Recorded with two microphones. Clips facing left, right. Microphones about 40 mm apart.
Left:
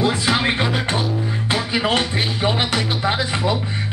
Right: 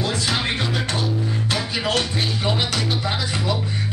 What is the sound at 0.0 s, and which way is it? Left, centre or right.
Music, centre.